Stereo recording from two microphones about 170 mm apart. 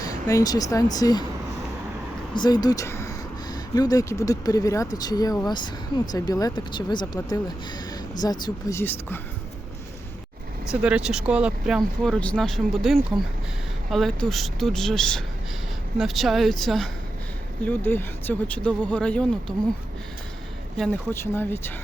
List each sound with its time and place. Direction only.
0.0 s speech: 20° left (ahead or behind)
2.3 s speech: 25° left (ahead or behind)
8.8 s speech: 10° left (ahead or behind)
10.7 s speech: 5° right (ahead or behind)
21.1 s speech: 15° left (ahead or behind)